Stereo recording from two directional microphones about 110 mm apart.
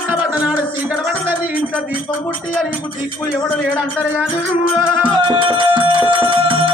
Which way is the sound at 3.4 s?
15° left (ahead or behind).